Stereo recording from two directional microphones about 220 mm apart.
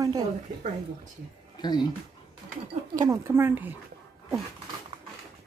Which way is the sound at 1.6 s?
20° left (ahead or behind).